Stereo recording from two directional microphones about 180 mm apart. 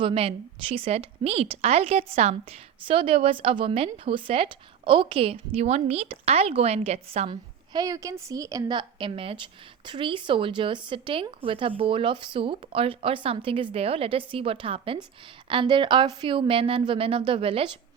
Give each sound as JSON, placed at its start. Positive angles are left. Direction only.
{"t": 0.0, "sound": "a woman's voice", "side_deg": -30}